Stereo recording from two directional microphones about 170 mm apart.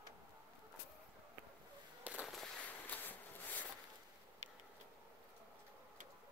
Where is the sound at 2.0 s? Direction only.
5° right (ahead or behind).